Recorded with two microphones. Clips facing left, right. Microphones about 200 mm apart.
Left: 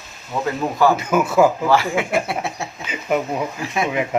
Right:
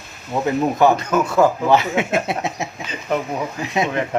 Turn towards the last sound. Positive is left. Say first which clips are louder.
# right 2 dB
turn(degrees=-20)  # may be behind; listen again after turning